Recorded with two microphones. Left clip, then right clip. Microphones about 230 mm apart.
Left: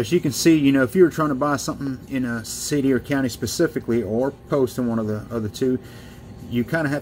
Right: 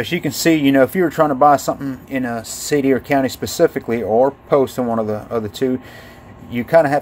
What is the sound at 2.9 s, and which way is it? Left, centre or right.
Speech, right.